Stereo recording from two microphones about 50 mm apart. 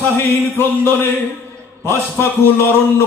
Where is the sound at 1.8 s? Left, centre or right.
Left.